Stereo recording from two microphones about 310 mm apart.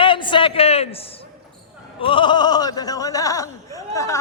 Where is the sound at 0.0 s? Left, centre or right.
Centre.